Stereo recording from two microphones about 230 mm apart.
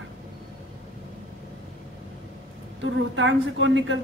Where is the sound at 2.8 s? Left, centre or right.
Right.